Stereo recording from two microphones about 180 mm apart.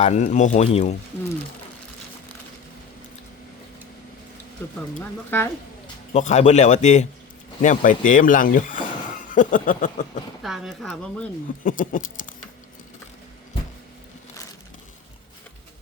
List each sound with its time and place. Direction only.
0.0 s speech: 40° left (ahead or behind)
5.3 s speech: 10° left (ahead or behind)
6.1 s speech: 40° left (ahead or behind)
10.4 s speech: centre (ahead or behind)
11.6 s speech: 50° left (ahead or behind)